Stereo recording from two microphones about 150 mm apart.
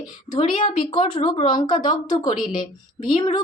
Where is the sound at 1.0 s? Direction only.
35° left (ahead or behind).